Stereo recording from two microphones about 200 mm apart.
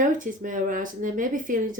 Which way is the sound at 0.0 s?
40° right (ahead or behind).